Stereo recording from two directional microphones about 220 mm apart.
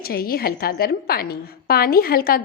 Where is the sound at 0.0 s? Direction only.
45° left (ahead or behind).